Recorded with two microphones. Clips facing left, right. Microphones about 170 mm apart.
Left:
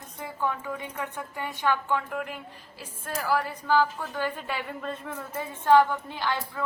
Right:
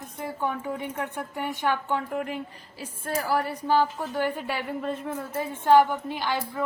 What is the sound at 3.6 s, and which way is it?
A woman's voice, 20° right (ahead or behind).